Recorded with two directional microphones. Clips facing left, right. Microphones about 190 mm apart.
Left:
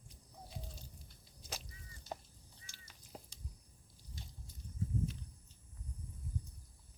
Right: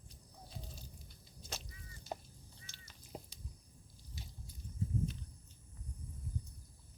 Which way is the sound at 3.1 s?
20° right (ahead or behind).